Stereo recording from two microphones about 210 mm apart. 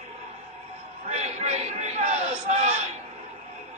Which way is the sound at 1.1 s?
30° right (ahead or behind).